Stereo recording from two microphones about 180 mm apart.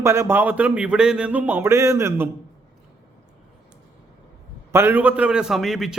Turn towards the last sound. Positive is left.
turn(degrees=0)  # may be behind; listen again after turning